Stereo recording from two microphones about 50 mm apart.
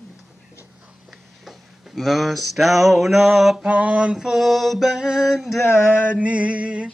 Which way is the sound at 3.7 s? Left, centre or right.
Right.